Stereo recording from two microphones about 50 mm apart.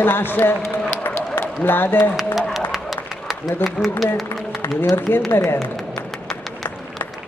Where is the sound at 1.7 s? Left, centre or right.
Left.